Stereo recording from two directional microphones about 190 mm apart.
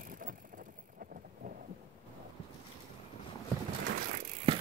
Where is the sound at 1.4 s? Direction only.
45° right (ahead or behind).